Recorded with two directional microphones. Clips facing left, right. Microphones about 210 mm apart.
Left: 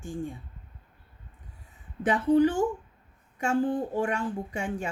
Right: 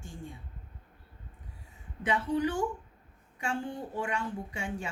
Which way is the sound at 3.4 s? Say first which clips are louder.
Left 9 dB; 45° left (ahead or behind).